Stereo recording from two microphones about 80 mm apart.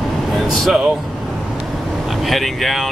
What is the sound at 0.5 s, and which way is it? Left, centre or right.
Speech, centre.